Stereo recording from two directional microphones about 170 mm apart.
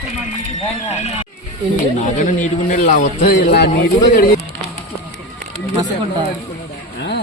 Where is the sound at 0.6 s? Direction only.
40° left (ahead or behind); by 3.7 s 65° left (ahead or behind).